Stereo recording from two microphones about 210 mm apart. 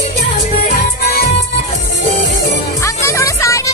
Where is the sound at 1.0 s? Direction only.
45° left (ahead or behind).